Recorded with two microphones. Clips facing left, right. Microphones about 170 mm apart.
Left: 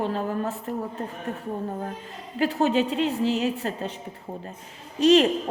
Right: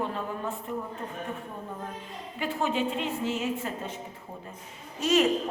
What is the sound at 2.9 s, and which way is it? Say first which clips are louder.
Speech: left 7 dB; 35° left (ahead or behind).